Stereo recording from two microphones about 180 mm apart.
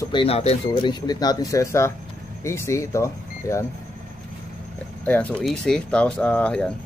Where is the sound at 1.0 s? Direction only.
20° left (ahead or behind).